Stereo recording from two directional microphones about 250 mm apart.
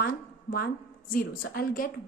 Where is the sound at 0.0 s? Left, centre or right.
Left.